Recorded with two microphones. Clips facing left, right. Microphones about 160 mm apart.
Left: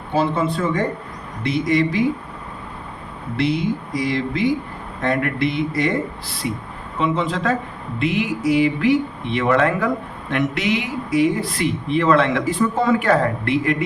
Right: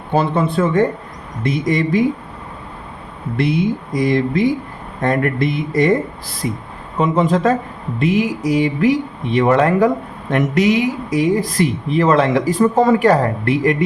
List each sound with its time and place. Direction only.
0.1 s speech: 55° right (ahead or behind)
3.3 s speech: 50° right (ahead or behind)
7.0 s speech: 45° right (ahead or behind)